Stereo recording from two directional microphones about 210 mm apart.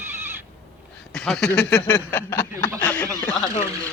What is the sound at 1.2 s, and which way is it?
Speech, centre (ahead or behind).